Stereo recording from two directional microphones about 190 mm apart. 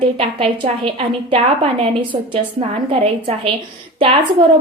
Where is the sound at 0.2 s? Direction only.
30° right (ahead or behind).